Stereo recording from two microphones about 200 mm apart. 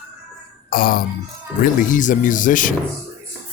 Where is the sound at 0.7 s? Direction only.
45° left (ahead or behind).